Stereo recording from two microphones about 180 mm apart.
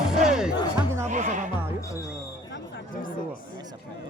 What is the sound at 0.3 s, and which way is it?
Music, 5° right (ahead or behind).